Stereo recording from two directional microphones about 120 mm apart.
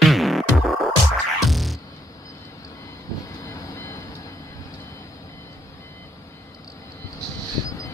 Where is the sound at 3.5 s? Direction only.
25° left (ahead or behind).